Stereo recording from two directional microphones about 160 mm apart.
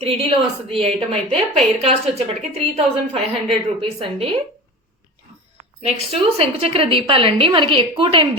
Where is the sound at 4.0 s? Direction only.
40° right (ahead or behind).